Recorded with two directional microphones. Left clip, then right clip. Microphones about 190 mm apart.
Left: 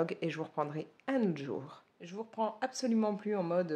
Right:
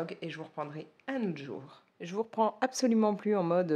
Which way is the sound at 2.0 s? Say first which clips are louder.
Right 6 dB; 50° right (ahead or behind).